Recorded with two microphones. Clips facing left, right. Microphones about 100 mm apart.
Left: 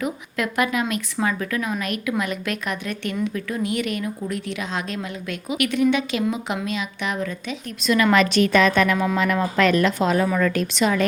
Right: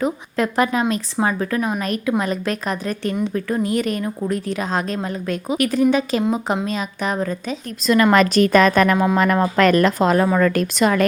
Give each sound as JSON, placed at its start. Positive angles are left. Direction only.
{"t": 0.0, "sound": "a woman's voice", "side_deg": -35}